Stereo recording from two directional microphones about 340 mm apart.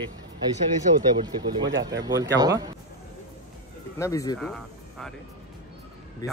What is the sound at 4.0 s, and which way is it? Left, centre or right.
Speech, centre.